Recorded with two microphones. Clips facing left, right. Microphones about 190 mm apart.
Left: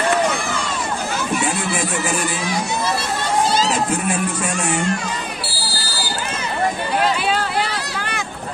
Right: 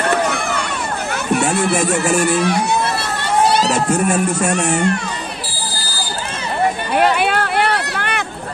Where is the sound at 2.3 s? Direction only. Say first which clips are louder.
Right 7 dB; 65° right (ahead or behind).